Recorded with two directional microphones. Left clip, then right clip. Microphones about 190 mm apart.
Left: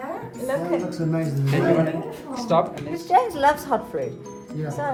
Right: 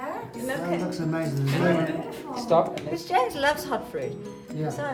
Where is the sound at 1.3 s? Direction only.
Centre (ahead or behind).